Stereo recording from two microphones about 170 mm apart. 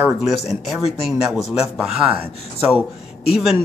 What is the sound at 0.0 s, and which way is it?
Speech, centre (ahead or behind).